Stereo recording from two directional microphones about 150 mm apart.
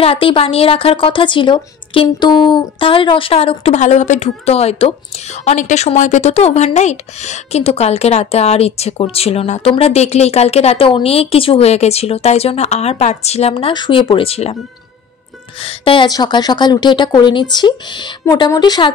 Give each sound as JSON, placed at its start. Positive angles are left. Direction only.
{"t": 0.0, "sound": "a woman's voice", "side_deg": 35}
{"t": 3.8, "sound": "a woman's voice", "side_deg": 55}
{"t": 15.6, "sound": "a woman's voice", "side_deg": 35}